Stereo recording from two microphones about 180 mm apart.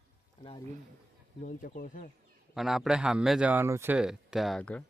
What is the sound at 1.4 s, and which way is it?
Speech, 50° left (ahead or behind).